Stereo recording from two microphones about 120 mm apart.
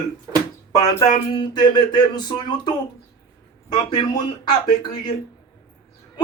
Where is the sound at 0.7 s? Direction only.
30° left (ahead or behind).